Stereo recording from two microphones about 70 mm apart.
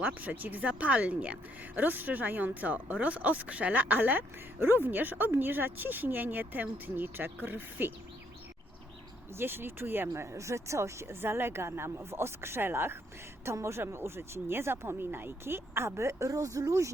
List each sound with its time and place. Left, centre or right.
0.0 s a woman's voice: right
9.4 s speech: right
10.1 s speech: right